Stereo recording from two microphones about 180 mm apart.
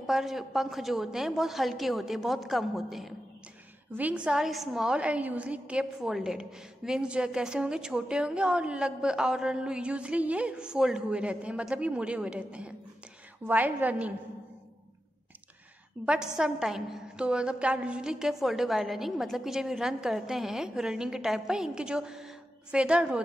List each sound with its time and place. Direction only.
0.0 s a woman's voice: centre (ahead or behind)
16.0 s a woman's voice: 5° right (ahead or behind)